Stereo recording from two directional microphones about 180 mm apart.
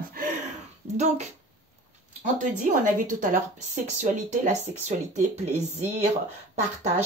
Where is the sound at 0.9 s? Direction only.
40° right (ahead or behind).